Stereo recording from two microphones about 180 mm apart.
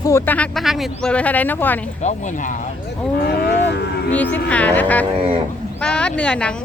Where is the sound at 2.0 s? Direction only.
45° left (ahead or behind).